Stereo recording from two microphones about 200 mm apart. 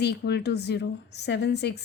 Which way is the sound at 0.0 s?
55° left (ahead or behind).